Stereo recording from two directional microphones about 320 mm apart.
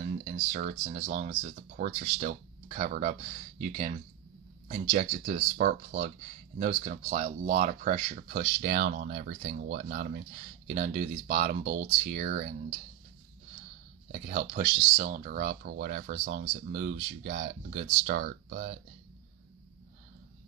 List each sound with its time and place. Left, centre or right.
0.2 s speech: right
14.2 s speech: right